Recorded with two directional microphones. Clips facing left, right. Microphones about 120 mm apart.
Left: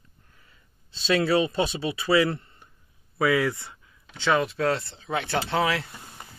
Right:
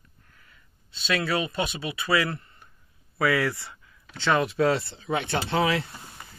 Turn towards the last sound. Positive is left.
turn(degrees=-5)  # may be behind; listen again after turning